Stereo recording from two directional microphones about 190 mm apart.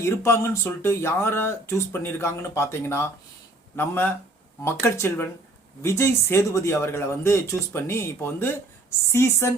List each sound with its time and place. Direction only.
0.0 s speech: 15° left (ahead or behind)